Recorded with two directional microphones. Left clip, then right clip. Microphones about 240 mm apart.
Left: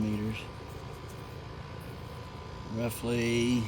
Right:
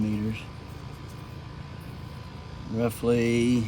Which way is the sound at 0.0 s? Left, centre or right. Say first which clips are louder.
Right 3 dB; left.